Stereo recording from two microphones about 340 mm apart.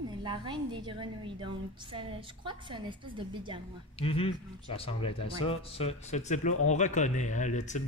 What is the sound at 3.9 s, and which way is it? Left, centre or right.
Speech, centre.